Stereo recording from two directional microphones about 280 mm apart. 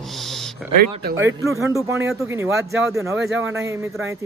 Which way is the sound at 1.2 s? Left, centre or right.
Centre.